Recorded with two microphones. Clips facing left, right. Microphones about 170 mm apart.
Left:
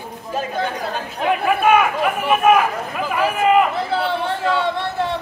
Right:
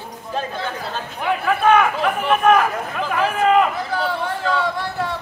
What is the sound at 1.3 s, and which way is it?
Speech, 10° left (ahead or behind).